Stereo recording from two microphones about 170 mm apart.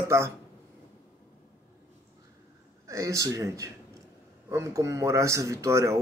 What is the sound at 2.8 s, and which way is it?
Speech, 20° right (ahead or behind).